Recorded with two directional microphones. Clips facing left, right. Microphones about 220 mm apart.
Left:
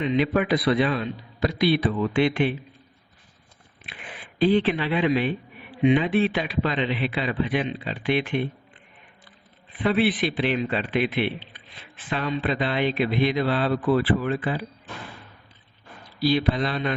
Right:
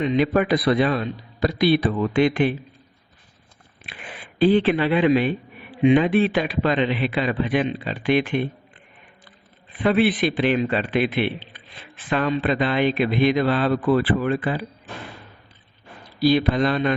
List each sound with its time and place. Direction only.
0.0 s a man's voice: 40° right (ahead or behind)
4.6 s a man's voice: 45° right (ahead or behind)
9.8 s a man's voice: 50° right (ahead or behind)
12.1 s a man's voice: 55° right (ahead or behind)
16.2 s a man's voice: 50° right (ahead or behind)